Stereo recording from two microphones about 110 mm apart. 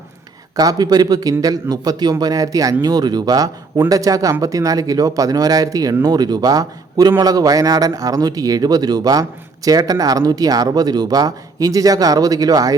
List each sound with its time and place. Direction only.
0.5 s speech: 35° right (ahead or behind)